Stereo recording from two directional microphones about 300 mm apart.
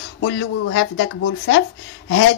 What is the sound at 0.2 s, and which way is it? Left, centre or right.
A woman's voice, left.